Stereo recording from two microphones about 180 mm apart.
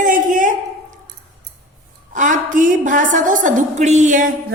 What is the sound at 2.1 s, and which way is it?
A woman's voice, 45° right (ahead or behind).